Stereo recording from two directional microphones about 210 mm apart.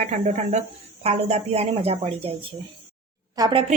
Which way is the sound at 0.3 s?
35° right (ahead or behind).